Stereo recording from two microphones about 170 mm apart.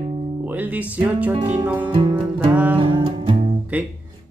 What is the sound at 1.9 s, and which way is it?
Music, 25° right (ahead or behind).